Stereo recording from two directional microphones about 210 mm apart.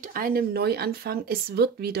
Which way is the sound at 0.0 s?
45° right (ahead or behind).